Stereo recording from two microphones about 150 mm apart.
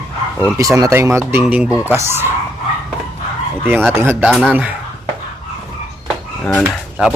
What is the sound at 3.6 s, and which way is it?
Speech, 10° right (ahead or behind).